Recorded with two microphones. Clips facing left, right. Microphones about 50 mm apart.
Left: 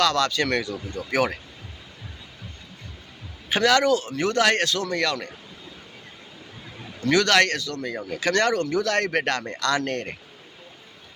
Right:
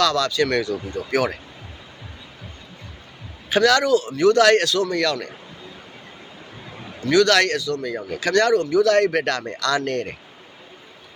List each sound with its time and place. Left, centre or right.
0.0 s speech: left
0.7 s speech: right
3.5 s speech: left
7.0 s speech: left